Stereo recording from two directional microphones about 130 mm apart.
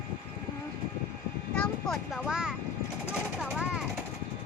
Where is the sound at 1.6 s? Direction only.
5° left (ahead or behind).